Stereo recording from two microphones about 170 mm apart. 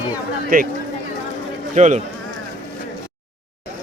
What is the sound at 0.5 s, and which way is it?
Speech, 55° right (ahead or behind).